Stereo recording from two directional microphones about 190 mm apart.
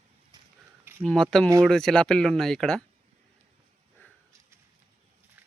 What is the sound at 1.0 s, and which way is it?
Speech, 5° left (ahead or behind).